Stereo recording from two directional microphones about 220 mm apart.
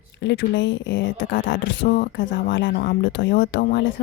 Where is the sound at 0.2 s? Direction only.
55° left (ahead or behind).